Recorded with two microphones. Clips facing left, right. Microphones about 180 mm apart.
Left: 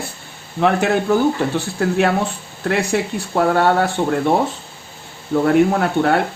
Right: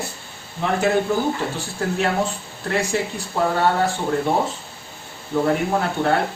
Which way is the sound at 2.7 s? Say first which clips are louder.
Left 4 dB; 70° left (ahead or behind).